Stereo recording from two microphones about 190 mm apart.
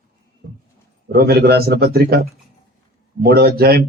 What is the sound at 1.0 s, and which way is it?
Speech, 55° right (ahead or behind).